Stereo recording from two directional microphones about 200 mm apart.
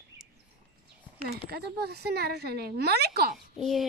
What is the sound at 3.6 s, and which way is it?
Speech, centre (ahead or behind).